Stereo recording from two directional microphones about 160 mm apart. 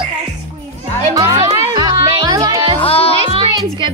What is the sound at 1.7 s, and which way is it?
Music, 25° right (ahead or behind).